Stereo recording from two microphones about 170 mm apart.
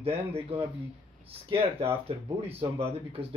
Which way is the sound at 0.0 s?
35° right (ahead or behind).